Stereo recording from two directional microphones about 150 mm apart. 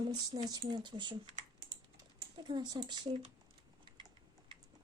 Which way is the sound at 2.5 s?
30° right (ahead or behind).